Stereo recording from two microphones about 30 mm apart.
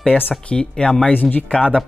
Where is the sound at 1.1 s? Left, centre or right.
Left.